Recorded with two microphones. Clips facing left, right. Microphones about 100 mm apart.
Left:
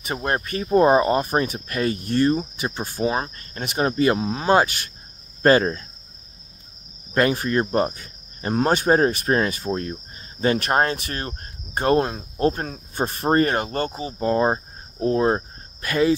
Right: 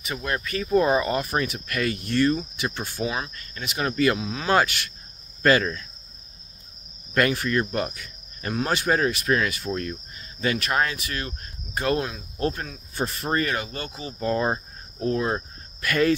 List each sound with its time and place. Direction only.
0.0 s speech: 45° left (ahead or behind)
7.2 s cricket: 30° left (ahead or behind)
8.5 s speech: 40° left (ahead or behind)
13.9 s speech: 30° left (ahead or behind)